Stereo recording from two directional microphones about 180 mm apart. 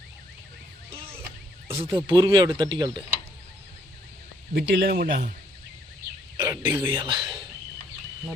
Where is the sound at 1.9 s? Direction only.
25° right (ahead or behind).